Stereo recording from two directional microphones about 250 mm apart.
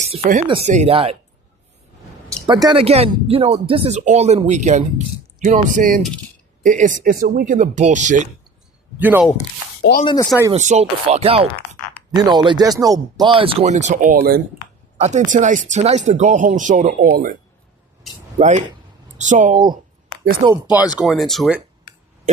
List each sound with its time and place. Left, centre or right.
0.0 s speech: right
2.5 s speech: centre
9.0 s speech: centre
10.0 s speech: centre
10.5 s speech: right
18.3 s speech: right
20.9 s speech: centre